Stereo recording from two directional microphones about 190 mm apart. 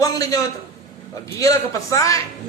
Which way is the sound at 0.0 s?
20° left (ahead or behind).